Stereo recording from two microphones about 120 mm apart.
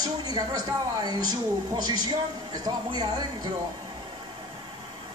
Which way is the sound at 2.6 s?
35° right (ahead or behind).